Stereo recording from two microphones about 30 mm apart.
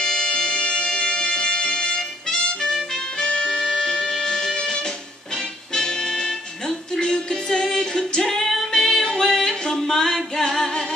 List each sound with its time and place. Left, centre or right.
0.0 s music: left